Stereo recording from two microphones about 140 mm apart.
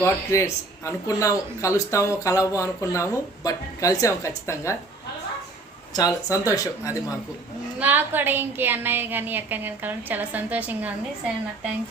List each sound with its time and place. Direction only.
0.0 s speech: 20° left (ahead or behind)
5.9 s speech: 25° left (ahead or behind)
7.8 s a woman's voice: 15° right (ahead or behind)